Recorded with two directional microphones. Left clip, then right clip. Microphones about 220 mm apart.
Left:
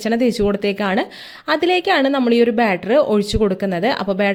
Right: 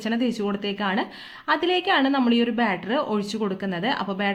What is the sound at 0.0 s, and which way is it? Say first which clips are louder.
Speech: left 9 dB; 35° left (ahead or behind).